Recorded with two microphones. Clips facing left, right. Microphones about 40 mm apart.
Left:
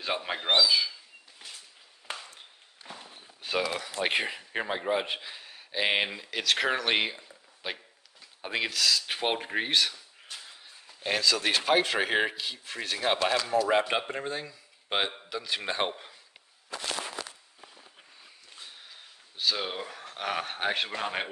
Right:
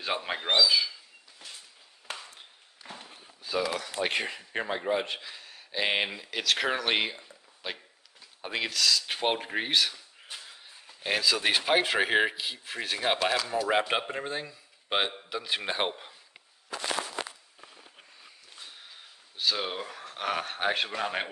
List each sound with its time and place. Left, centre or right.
0.0 s speech: centre
2.1 s ping: centre
2.8 s walk: centre
3.2 s walk: left
4.0 s speech: centre
18.6 s speech: centre